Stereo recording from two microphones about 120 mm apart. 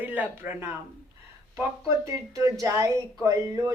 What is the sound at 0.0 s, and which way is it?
Speech, 15° right (ahead or behind).